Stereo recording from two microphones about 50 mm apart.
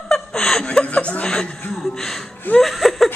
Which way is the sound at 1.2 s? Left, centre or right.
Centre.